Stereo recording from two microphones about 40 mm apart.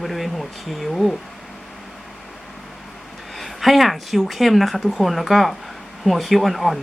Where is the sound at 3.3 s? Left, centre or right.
Centre.